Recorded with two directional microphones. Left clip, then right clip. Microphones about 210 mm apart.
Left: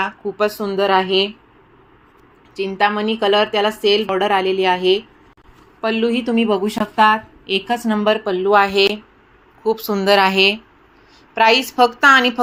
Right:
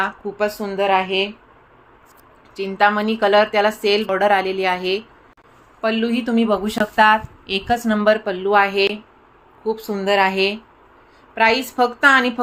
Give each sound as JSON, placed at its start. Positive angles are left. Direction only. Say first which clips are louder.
{"t": 0.0, "sound": "a woman's voice", "louder": "left 2 dB", "side_deg": 15}
{"t": 2.6, "sound": "a woman's voice", "louder": "right 1 dB", "side_deg": 0}